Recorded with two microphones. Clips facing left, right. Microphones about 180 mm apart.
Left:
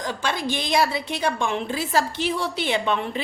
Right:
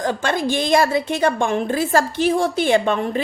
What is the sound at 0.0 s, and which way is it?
A woman's voice, 50° right (ahead or behind).